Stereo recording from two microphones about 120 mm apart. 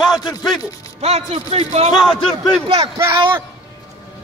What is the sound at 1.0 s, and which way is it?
Speech, 65° right (ahead or behind).